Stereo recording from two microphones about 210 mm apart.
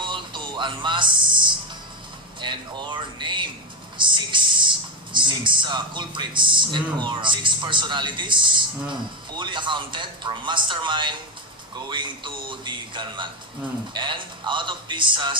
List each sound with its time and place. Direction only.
0.0 s music: 20° right (ahead or behind)
2.4 s speech: 20° right (ahead or behind)